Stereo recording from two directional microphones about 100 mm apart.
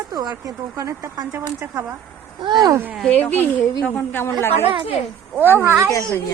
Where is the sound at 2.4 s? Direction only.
45° right (ahead or behind).